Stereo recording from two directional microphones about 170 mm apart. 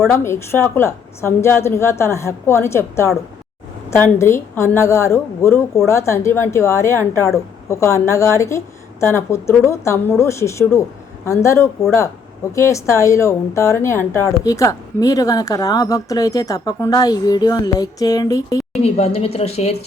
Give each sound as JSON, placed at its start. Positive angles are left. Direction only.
{"t": 0.1, "sound": "a woman's voice", "side_deg": 15}
{"t": 18.7, "sound": "a woman's voice", "side_deg": 40}